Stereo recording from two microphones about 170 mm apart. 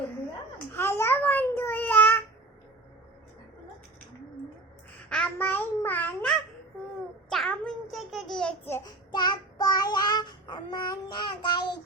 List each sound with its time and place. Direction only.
0.7 s a sound: 15° left (ahead or behind)
5.0 s babbling: 5° left (ahead or behind)
9.1 s child singing: 25° left (ahead or behind)